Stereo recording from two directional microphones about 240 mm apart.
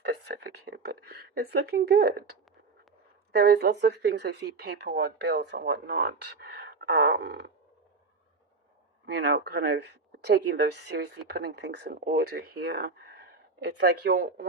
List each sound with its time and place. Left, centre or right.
0.0 s speech: right
3.3 s speech: right
9.0 s speech: right